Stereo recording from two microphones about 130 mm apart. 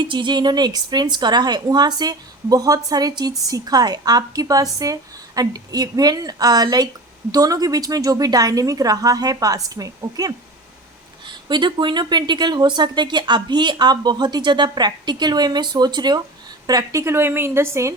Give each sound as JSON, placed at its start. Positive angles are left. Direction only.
{"t": 0.1, "sound": "a woman's voice", "side_deg": -35}
{"t": 11.4, "sound": "a woman's voice", "side_deg": -35}